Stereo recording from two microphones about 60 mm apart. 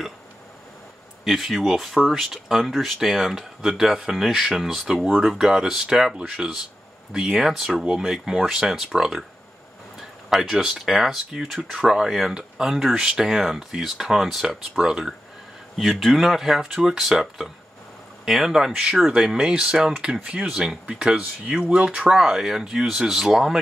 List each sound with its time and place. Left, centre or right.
1.2 s speech: centre
4.9 s speech: centre
5.2 s speech: centre
6.4 s speech: centre
7.1 s speech: centre